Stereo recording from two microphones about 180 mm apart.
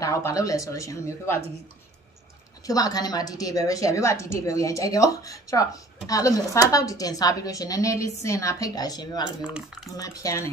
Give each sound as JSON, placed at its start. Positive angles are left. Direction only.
{"t": 0.0, "sound": "speech", "side_deg": 20}
{"t": 2.6, "sound": "a woman's voice", "side_deg": 20}